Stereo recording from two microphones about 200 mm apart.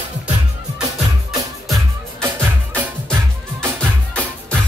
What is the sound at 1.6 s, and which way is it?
Music, centre (ahead or behind).